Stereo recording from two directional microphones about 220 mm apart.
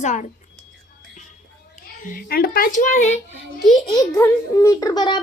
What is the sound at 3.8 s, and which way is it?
A child's voice, 15° left (ahead or behind).